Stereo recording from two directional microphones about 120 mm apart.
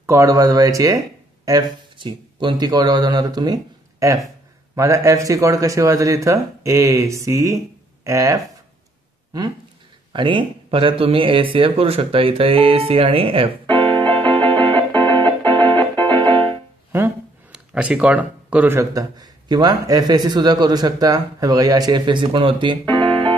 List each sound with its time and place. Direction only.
0.0 s speech: 25° right (ahead or behind)
2.0 s speech: 45° right (ahead or behind); by 8.4 s 25° right (ahead or behind)
10.1 s speech: 45° right (ahead or behind)
14.6 s music: 45° right (ahead or behind)
17.5 s speech: 10° right (ahead or behind)
18.8 s a man's voice: 30° right (ahead or behind)
22.9 s music: 45° right (ahead or behind)